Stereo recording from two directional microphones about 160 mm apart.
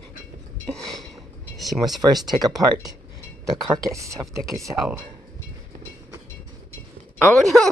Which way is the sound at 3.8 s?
20° right (ahead or behind).